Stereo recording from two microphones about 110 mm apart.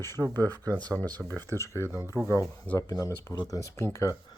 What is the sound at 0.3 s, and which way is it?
Speech, 15° left (ahead or behind).